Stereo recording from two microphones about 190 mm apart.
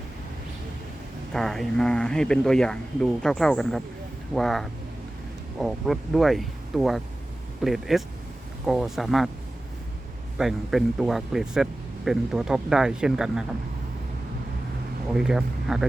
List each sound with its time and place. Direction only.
1.3 s speech: centre (ahead or behind)
10.3 s speech: centre (ahead or behind)
15.1 s speech: 5° right (ahead or behind)